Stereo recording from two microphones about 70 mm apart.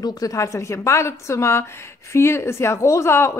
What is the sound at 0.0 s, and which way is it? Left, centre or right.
A woman's voice, left.